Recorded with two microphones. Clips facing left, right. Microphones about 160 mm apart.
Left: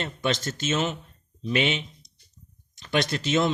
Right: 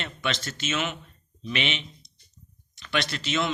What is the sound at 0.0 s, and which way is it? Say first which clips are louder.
A man's voice: left 4 dB; 45° left (ahead or behind).